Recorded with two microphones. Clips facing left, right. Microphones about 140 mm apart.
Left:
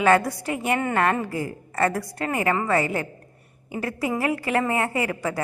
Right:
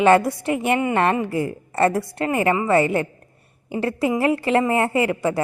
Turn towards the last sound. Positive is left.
turn(degrees=-25)  # may be behind; listen again after turning